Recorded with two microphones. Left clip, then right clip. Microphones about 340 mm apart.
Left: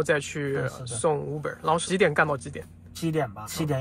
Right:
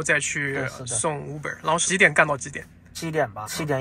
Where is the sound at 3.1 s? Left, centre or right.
Right.